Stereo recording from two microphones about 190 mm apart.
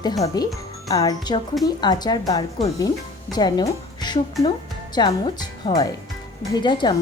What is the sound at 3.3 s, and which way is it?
A woman's voice, 20° left (ahead or behind).